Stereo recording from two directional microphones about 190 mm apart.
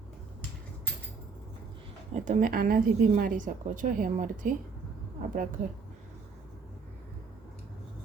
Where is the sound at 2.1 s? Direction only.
40° right (ahead or behind).